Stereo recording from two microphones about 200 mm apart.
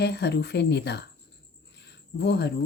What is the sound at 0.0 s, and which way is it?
Speech, 55° left (ahead or behind).